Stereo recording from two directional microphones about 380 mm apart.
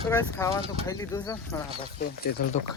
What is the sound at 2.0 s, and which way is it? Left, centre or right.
Speech, left.